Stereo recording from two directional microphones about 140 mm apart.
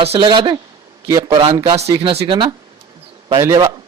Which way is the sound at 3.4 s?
20° right (ahead or behind).